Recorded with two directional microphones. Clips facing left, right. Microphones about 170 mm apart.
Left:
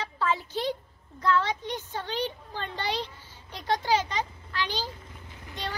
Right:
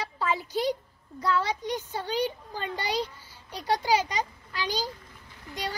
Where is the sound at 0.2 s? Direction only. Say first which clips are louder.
Right 1 dB; 15° right (ahead or behind).